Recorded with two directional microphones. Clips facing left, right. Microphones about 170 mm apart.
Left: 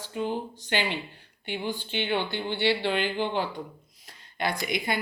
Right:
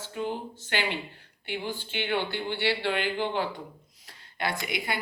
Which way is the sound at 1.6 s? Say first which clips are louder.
Left 3 dB; 20° left (ahead or behind).